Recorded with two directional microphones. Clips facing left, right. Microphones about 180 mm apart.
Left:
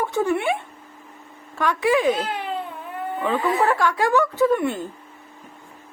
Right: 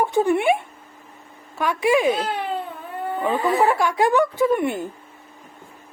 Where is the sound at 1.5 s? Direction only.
10° right (ahead or behind).